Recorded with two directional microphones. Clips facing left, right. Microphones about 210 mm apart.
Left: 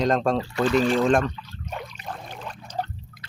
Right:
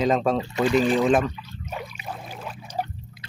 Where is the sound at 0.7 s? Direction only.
10° right (ahead or behind).